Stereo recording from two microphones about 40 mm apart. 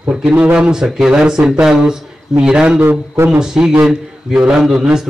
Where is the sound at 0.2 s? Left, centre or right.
Right.